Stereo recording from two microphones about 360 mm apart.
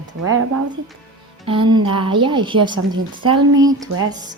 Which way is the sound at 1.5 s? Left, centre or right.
Centre.